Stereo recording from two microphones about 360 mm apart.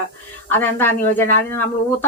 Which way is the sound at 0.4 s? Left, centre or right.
Centre.